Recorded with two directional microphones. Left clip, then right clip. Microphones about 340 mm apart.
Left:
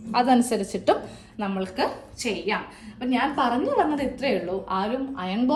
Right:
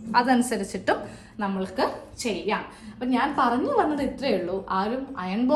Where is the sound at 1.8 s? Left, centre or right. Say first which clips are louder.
Even; centre.